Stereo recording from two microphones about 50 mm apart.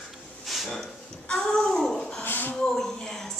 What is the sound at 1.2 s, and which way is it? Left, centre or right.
A child's voice, centre.